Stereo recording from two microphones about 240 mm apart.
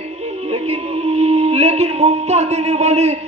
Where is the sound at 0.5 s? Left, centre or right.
Right.